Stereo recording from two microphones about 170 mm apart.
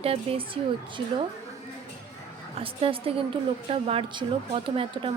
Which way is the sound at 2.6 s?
35° right (ahead or behind).